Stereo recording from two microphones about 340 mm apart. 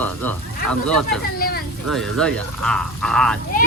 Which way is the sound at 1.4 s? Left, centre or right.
Left.